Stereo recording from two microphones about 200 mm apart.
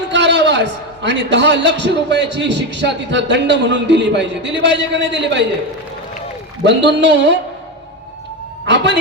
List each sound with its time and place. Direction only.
0.1 s a man's voice: 60° right (ahead or behind)
6.7 s a man's voice: 60° right (ahead or behind)
8.6 s a sound: 60° right (ahead or behind)